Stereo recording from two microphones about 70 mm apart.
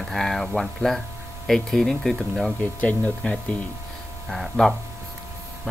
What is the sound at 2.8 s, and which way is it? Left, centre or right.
Speech, left.